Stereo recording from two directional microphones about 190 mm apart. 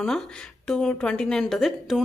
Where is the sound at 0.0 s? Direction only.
5° left (ahead or behind).